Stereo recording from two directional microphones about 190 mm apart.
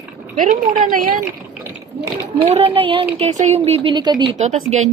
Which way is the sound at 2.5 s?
30° right (ahead or behind).